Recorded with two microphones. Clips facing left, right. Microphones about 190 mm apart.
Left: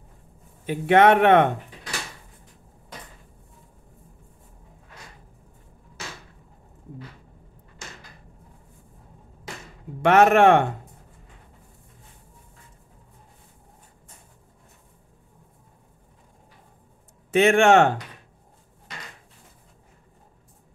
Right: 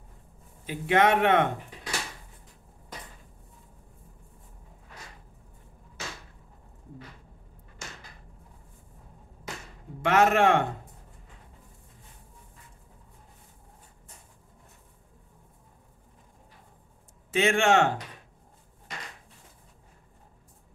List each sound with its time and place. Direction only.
0.7 s speech: 60° left (ahead or behind)
10.0 s speech: 60° left (ahead or behind)
17.3 s speech: 60° left (ahead or behind)